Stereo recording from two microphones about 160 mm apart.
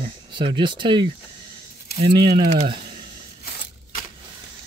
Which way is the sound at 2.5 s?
40° right (ahead or behind).